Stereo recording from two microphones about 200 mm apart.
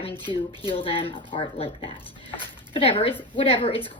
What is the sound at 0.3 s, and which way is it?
Speech, 25° left (ahead or behind).